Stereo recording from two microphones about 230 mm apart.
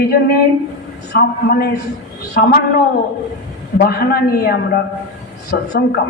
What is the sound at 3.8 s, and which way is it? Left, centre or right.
A man's voice, left.